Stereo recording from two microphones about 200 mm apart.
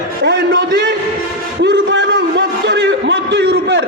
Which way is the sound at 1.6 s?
60° right (ahead or behind).